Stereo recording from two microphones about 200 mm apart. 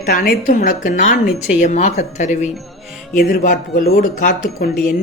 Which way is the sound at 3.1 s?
45° left (ahead or behind).